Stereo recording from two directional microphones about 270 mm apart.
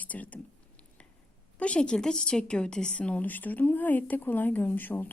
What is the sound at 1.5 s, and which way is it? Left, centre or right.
A woman's voice, centre.